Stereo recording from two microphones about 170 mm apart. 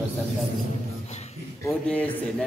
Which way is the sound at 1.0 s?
40° left (ahead or behind).